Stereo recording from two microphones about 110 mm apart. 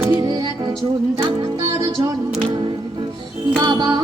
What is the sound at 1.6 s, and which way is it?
Music, 30° right (ahead or behind).